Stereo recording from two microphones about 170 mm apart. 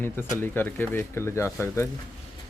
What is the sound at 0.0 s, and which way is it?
Speech, 15° left (ahead or behind).